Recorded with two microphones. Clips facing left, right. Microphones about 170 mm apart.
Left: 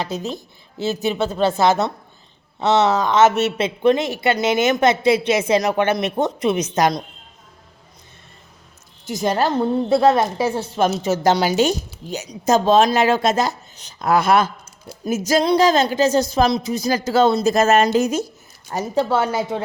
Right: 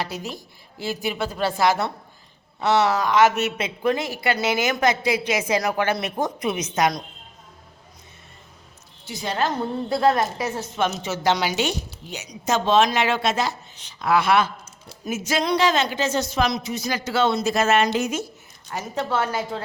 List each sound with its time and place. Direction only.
0.0 s a woman's voice: 20° left (ahead or behind)
9.0 s a woman's voice: 45° left (ahead or behind)
9.9 s a woman's voice: 25° left (ahead or behind)